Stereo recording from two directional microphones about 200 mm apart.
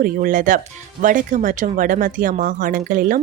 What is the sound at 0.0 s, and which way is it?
A woman's voice, 40° right (ahead or behind).